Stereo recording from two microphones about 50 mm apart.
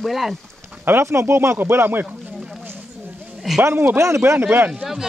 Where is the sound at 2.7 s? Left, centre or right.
Right.